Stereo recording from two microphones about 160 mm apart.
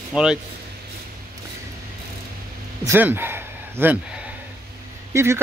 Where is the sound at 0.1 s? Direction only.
5° right (ahead or behind).